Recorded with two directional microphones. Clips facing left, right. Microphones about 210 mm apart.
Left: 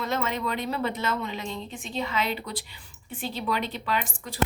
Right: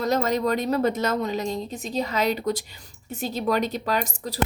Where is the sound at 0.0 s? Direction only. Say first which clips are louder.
Right 6 dB; 40° right (ahead or behind).